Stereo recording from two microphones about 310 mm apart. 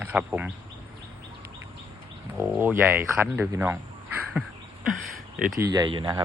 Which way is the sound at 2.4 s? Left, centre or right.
Centre.